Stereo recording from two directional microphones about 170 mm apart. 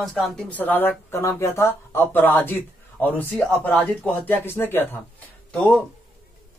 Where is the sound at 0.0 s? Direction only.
Centre (ahead or behind).